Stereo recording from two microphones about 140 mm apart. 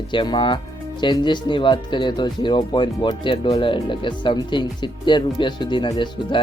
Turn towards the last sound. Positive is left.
turn(degrees=35)  # may be behind; listen again after turning